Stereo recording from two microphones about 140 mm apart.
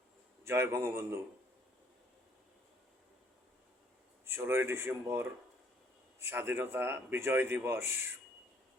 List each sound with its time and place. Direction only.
0.4 s speech: 15° right (ahead or behind)
4.3 s speech: 15° right (ahead or behind)